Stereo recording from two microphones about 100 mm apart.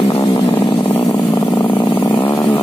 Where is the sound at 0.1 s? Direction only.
30° left (ahead or behind).